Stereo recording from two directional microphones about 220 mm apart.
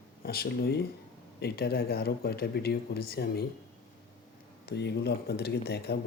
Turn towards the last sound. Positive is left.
turn(degrees=50)  # may be behind; listen again after turning